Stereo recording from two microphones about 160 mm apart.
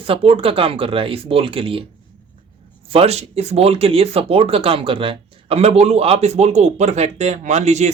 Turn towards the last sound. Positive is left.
turn(degrees=-45)  # may be behind; listen again after turning